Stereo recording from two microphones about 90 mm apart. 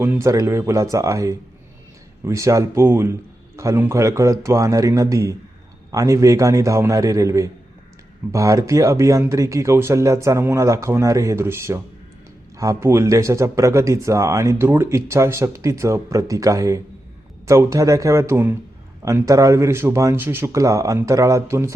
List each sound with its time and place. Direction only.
0.0 s speech: 30° right (ahead or behind)